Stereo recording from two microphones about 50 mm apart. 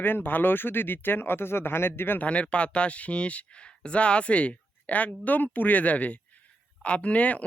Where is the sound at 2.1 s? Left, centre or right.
Left.